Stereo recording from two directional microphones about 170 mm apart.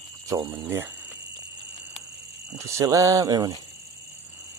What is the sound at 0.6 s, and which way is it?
Speech, 15° right (ahead or behind).